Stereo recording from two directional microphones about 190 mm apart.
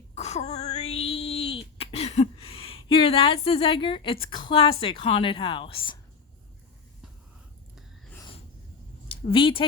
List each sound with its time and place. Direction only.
0.1 s wail: 35° left (ahead or behind)
1.8 s a woman's voice: 35° left (ahead or behind)
9.0 s speech: 25° left (ahead or behind)